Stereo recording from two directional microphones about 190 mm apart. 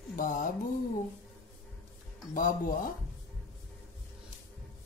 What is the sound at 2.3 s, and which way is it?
Speech, 45° left (ahead or behind).